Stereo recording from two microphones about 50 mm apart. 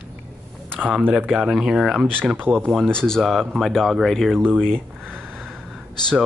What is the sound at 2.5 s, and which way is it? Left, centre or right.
Speech, right.